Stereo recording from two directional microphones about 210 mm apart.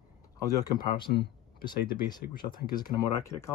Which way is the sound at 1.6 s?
20° left (ahead or behind).